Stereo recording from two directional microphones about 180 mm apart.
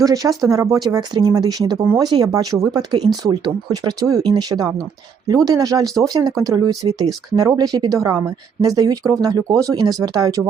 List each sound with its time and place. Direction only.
0.0 s speech: 20° right (ahead or behind)